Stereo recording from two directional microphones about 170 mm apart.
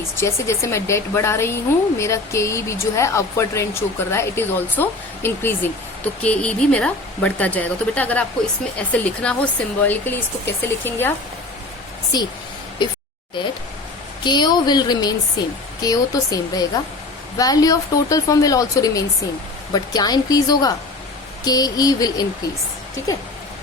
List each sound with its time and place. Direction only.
0.2 s speech: 15° left (ahead or behind)
12.1 s a woman's voice: 25° left (ahead or behind)
14.3 s a woman's voice: 25° left (ahead or behind)